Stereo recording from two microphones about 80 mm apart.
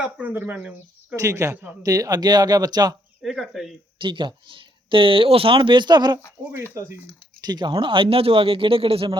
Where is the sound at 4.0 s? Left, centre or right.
Right.